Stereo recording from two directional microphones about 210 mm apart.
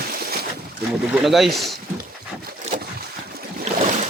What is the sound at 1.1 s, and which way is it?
Speech, centre (ahead or behind).